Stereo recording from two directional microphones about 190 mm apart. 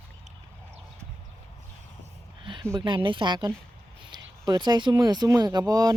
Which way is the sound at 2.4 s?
25° right (ahead or behind).